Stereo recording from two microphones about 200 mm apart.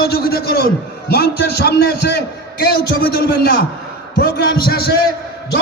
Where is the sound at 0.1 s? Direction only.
50° left (ahead or behind).